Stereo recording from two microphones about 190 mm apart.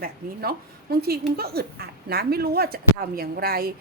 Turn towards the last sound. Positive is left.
turn(degrees=-50)  # may be behind; listen again after turning